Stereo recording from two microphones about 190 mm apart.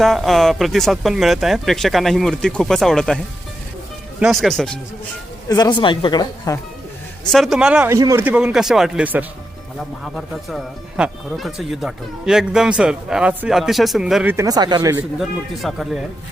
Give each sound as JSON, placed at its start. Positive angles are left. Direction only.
{"t": 0.0, "sound": "speech", "side_deg": 0}
{"t": 4.2, "sound": "speech", "side_deg": 0}
{"t": 5.5, "sound": "speech", "side_deg": 20}
{"t": 7.3, "sound": "speech", "side_deg": 0}
{"t": 15.2, "sound": "speech", "side_deg": 0}